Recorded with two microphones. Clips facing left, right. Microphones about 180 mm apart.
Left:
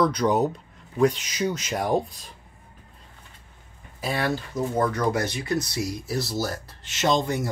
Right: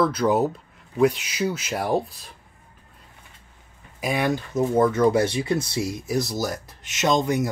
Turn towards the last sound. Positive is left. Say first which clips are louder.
# right 2 dB
turn(degrees=-15)  # may be behind; listen again after turning